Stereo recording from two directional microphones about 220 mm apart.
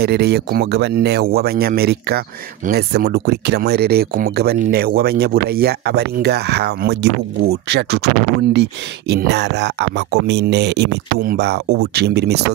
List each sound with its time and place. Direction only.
0.0 s speech: 45° right (ahead or behind)